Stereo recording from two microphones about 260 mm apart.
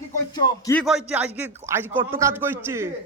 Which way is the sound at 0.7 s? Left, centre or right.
Centre.